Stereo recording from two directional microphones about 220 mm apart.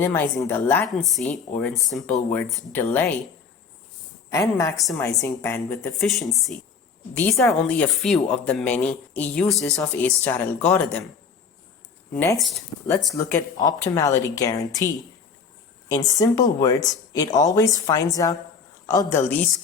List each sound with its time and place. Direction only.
0.0 s a woman's voice: 10° left (ahead or behind)
4.3 s speech: 15° left (ahead or behind)
6.0 s a woman's voice: centre (ahead or behind)
12.1 s a woman's voice: 5° left (ahead or behind)
13.1 s speech: 10° left (ahead or behind)
16.1 s speech: 15° left (ahead or behind)